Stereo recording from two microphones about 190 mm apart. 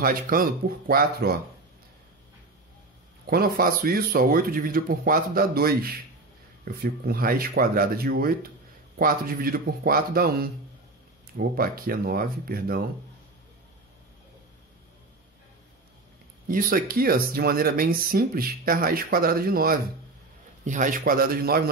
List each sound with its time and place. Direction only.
0.0 s speech: 50° right (ahead or behind)
3.3 s speech: 50° right (ahead or behind)
16.4 s speech: 50° right (ahead or behind)